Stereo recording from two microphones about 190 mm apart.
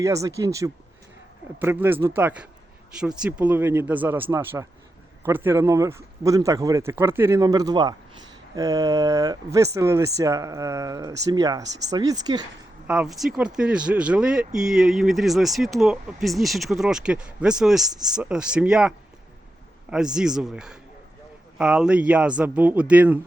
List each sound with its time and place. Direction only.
0.0 s speech: 15° right (ahead or behind)
12.9 s speech: 5° right (ahead or behind)